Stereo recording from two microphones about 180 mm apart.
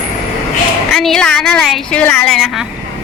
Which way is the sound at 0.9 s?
Centre (ahead or behind).